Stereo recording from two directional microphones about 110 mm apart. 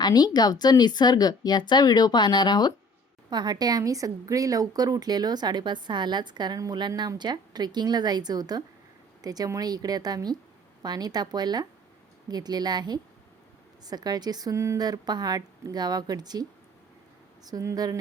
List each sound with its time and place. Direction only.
0.0 s speech: 40° left (ahead or behind)
3.2 s speech: 40° right (ahead or behind)